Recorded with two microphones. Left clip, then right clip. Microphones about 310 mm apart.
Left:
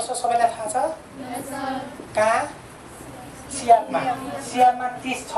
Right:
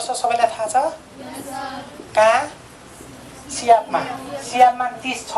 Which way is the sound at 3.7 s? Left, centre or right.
Right.